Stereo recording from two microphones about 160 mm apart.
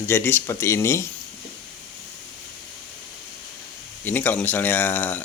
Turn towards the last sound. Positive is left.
turn(degrees=10)  # may be behind; listen again after turning